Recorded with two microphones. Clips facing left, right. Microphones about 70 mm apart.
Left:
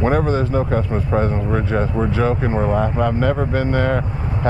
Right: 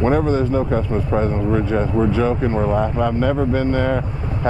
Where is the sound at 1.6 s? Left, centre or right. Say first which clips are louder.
Right 2 dB; centre.